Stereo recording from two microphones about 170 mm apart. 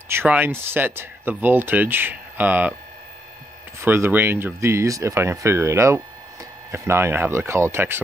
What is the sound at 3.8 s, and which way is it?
Speech, 15° right (ahead or behind).